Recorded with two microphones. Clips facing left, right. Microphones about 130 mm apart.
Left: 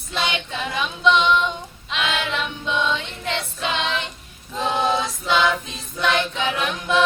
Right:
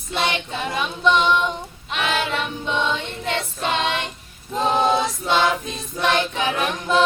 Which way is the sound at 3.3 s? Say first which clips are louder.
Right 2 dB; 40° right (ahead or behind).